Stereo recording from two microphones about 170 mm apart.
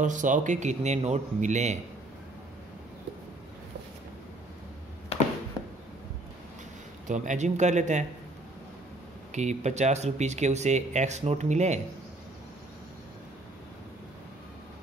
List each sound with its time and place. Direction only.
0.0 s speech: 45° right (ahead or behind)
7.1 s speech: 45° right (ahead or behind)
9.3 s speech: 40° right (ahead or behind)